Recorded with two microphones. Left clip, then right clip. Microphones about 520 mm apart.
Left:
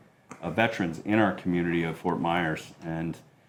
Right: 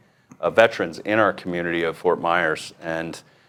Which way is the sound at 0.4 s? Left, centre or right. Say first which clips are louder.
Right 10 dB; right.